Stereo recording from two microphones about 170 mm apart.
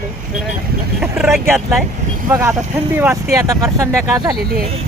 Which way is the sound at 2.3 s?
15° right (ahead or behind).